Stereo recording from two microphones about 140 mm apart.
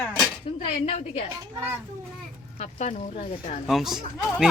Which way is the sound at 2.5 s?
50° left (ahead or behind).